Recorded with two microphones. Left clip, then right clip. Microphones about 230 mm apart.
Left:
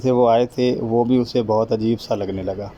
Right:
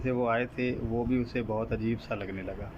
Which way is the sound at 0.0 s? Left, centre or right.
Left.